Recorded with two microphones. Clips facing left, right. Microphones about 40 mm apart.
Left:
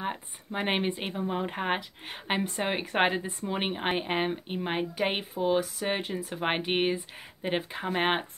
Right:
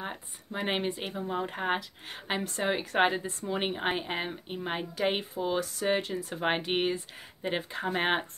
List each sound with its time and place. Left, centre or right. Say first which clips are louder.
0.0 s a woman's voice: left 4 dB; left
3.9 s a woman's voice: left 4 dB; left